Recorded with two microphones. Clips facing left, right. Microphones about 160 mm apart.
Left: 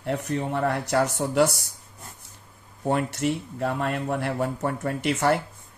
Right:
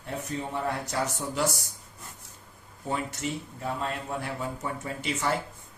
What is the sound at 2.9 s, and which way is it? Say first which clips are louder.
Speech: left 7 dB; 65° left (ahead or behind).